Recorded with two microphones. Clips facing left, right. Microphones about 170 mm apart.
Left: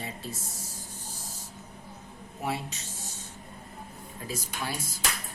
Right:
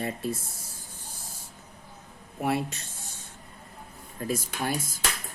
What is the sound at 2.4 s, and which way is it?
Speech, 55° right (ahead or behind).